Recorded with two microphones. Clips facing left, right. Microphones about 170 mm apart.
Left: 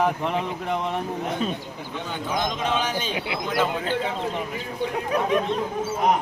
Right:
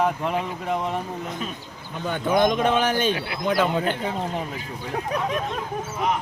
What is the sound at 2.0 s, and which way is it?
A man's voice, 55° right (ahead or behind).